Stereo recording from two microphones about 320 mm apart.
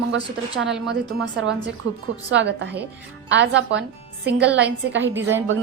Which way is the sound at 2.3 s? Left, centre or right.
Right.